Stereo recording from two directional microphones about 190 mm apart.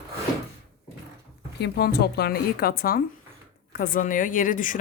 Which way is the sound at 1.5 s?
60° left (ahead or behind).